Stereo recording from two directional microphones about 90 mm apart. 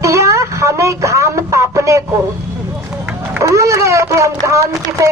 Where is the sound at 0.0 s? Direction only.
35° right (ahead or behind).